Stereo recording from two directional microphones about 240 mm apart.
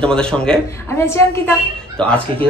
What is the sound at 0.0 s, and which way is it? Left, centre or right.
A woman's voice, centre.